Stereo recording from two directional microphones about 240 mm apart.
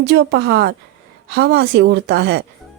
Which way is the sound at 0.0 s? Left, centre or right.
Right.